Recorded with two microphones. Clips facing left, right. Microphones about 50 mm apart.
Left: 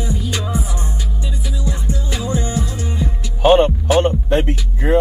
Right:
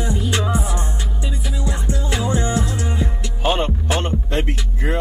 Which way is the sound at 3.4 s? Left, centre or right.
Left.